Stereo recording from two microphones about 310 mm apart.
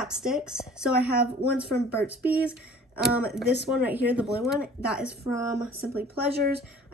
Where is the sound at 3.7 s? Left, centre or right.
Centre.